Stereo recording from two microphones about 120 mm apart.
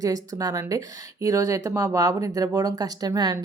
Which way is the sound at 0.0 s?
30° right (ahead or behind).